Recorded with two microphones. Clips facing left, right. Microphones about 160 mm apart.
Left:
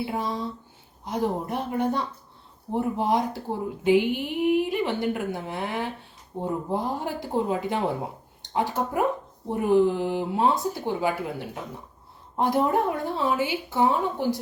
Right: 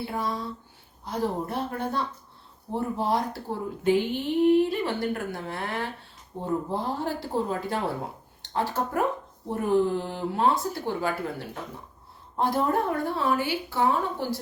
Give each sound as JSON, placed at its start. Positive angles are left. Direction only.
{"t": 0.1, "sound": "a woman's voice", "side_deg": 20}